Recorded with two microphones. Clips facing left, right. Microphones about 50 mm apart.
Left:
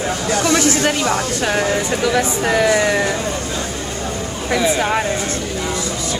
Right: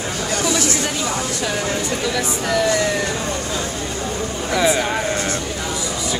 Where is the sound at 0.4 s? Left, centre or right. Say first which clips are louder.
Left 5 dB; left.